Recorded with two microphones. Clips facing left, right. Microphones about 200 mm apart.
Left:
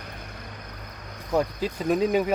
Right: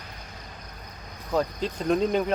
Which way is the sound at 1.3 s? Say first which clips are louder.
Left 1 dB; 5° left (ahead or behind).